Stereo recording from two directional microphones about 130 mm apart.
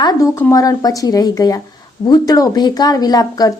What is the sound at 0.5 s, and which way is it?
Speech, 25° left (ahead or behind).